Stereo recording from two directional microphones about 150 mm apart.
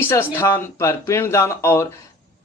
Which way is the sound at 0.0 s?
15° left (ahead or behind).